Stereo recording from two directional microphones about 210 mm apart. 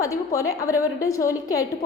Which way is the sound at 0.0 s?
15° left (ahead or behind).